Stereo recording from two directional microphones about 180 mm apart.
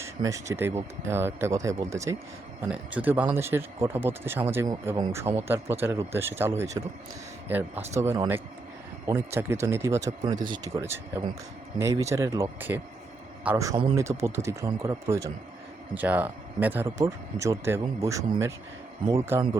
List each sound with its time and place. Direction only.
0.0 s speech: 15° right (ahead or behind)